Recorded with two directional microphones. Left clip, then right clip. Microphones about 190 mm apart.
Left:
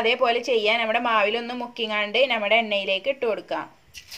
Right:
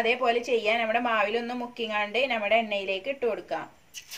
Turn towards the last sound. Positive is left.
turn(degrees=45)  # may be behind; listen again after turning